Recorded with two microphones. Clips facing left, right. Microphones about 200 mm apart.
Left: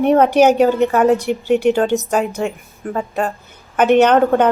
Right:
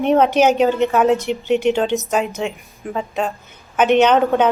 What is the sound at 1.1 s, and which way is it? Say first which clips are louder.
Speech: left 2 dB; 10° left (ahead or behind).